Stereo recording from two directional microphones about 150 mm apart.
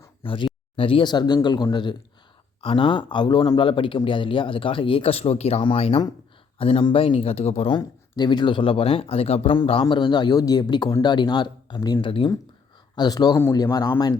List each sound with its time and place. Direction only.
0.2 s speech: 35° left (ahead or behind)
7.8 s speech: 30° left (ahead or behind)